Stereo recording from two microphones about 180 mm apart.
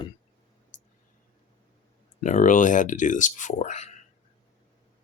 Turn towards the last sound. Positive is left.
turn(degrees=40)  # may be behind; listen again after turning